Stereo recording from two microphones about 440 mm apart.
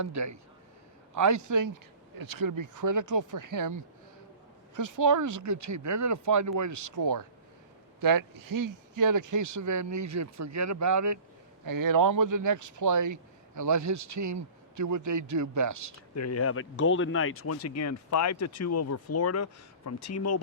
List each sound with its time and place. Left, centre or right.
0.0 s speech: right
16.1 s speech: left